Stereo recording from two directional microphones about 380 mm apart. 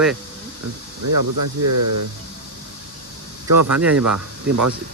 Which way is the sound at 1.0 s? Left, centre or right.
Right.